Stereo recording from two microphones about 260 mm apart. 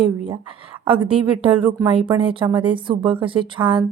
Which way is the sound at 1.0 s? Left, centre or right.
Right.